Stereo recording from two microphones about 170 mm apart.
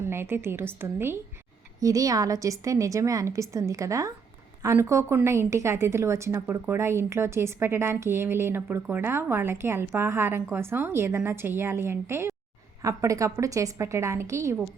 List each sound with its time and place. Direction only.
0.0 s a woman's voice: 15° right (ahead or behind)